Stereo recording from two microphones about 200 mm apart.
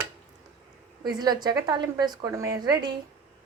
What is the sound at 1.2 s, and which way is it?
A woman's voice, 20° right (ahead or behind).